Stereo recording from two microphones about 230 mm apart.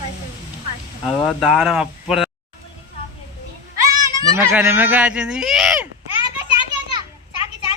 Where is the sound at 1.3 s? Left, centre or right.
Centre.